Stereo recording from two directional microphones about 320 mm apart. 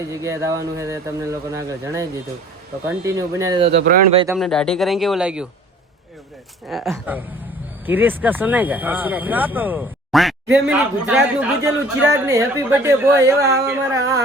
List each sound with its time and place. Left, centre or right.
0.1 s speech: centre
3.7 s speech: right
4.3 s speech: centre
6.7 s speech: centre